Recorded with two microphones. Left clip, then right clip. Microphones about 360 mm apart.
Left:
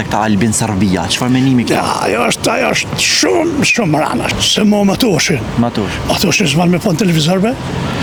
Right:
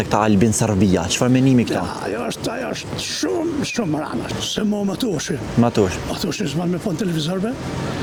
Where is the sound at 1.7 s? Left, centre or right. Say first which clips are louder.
Left 10 dB; left.